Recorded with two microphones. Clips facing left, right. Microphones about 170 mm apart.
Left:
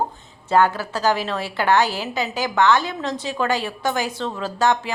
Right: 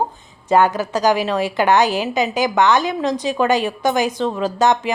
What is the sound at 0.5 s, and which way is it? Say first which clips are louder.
A woman's voice: right 3 dB; 15° right (ahead or behind).